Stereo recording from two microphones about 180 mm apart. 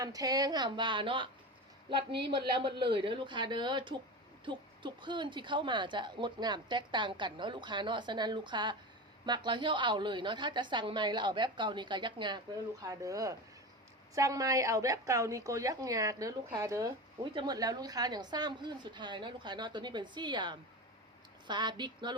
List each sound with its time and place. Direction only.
0.0 s a woman's voice: 20° right (ahead or behind)